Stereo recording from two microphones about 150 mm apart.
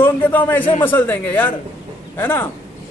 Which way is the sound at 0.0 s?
15° left (ahead or behind).